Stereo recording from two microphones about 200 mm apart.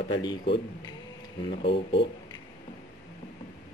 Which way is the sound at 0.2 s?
20° left (ahead or behind).